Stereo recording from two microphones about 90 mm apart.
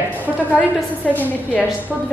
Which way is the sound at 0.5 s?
20° left (ahead or behind).